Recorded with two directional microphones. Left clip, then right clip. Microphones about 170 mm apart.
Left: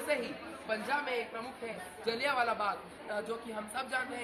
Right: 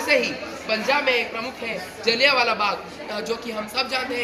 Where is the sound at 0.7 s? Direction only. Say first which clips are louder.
Right 13 dB; 10° left (ahead or behind).